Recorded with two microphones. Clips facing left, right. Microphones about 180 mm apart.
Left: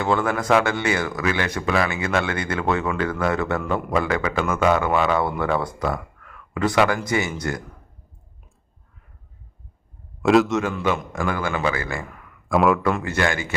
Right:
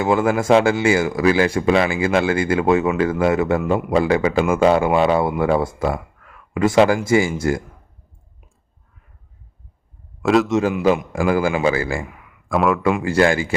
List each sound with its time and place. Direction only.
0.0 s speech: 25° right (ahead or behind)
10.2 s a man's voice: centre (ahead or behind)
11.1 s speech: 30° right (ahead or behind)
12.0 s a sound: 10° right (ahead or behind)
13.0 s speech: 30° right (ahead or behind)